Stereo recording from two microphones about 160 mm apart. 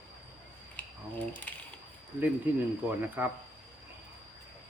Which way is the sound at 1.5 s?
10° left (ahead or behind).